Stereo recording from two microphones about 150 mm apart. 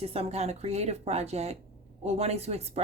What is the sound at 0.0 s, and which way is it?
Speech, 40° right (ahead or behind).